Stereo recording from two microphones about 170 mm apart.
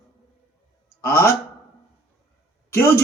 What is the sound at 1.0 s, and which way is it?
Speech, 15° left (ahead or behind).